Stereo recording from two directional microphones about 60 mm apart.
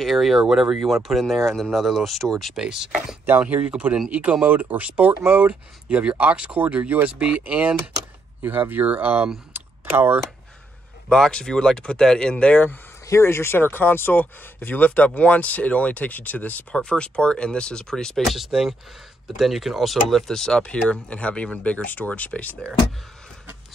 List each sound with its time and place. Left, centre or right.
0.0 s speech: centre
2.6 s speech: centre
3.3 s speech: right
8.4 s speech: right
9.5 s a sound: right
11.1 s speech: centre
13.1 s speech: left
16.7 s speech: centre